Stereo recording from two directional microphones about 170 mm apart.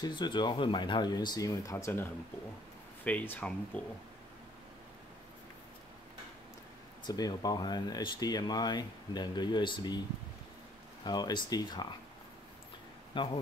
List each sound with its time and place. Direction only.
0.0 s speech: 25° left (ahead or behind); by 3.8 s 5° left (ahead or behind)
7.1 s speech: 25° left (ahead or behind)
11.1 s speech: 25° left (ahead or behind)
13.1 s speech: 30° left (ahead or behind)